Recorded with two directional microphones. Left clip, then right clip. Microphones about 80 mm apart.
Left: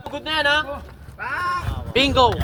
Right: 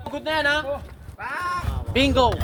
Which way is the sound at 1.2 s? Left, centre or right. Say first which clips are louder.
Left 3 dB; right.